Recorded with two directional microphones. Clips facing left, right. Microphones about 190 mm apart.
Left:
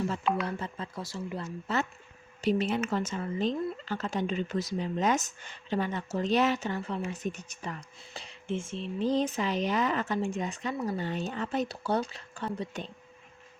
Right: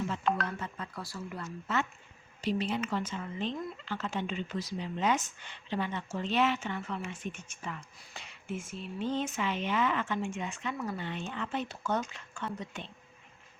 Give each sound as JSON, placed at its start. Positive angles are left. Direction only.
{"t": 0.4, "sound": "speech", "side_deg": 30}
{"t": 2.4, "sound": "speech", "side_deg": 50}